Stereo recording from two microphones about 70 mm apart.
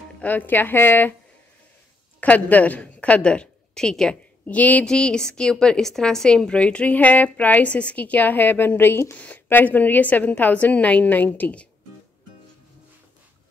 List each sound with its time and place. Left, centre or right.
0.2 s a woman's voice: left
2.1 s a woman's voice: left
4.8 s a woman's voice: centre